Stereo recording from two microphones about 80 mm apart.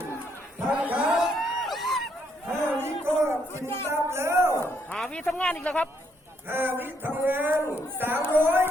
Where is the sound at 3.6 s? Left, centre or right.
Left.